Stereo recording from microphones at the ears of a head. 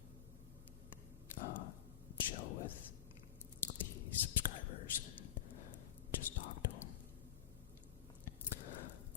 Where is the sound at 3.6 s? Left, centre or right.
Left.